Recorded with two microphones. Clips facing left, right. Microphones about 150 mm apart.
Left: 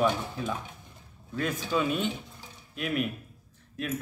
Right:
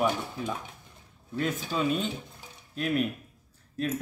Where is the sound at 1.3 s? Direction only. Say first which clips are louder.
Left 1 dB; 25° right (ahead or behind).